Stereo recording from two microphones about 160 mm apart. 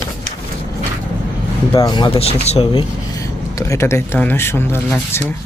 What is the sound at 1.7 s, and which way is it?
Speech, 25° left (ahead or behind).